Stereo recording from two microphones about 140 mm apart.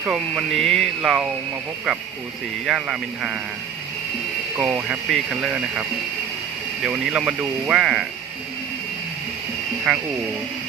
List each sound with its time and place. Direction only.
0.0 s speech: centre (ahead or behind)
2.6 s speech: 5° right (ahead or behind)
4.6 s speech: 5° right (ahead or behind)
6.8 s speech: 5° right (ahead or behind)
9.9 s speech: 5° right (ahead or behind)